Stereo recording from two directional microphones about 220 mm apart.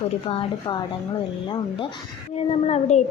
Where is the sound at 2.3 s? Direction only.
30° left (ahead or behind).